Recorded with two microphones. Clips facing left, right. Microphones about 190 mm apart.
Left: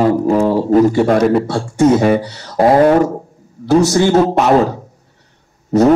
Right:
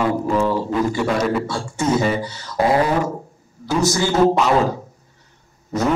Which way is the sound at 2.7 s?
50° left (ahead or behind).